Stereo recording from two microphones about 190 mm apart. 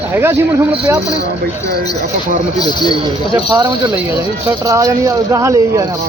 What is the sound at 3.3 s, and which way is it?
Speech, 15° right (ahead or behind).